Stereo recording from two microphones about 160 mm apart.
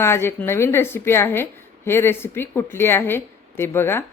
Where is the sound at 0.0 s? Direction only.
15° left (ahead or behind).